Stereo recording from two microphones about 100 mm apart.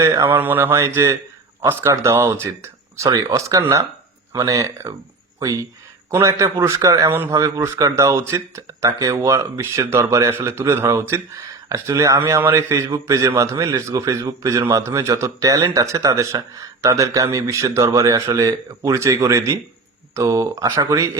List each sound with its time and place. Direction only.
0.0 s speech: 30° right (ahead or behind)
6.1 s speech: 30° right (ahead or behind)
7.1 s speech: 20° right (ahead or behind)
7.3 s speech: 30° right (ahead or behind)